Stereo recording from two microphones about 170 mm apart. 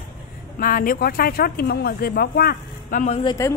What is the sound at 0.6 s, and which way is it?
Speech, 55° left (ahead or behind).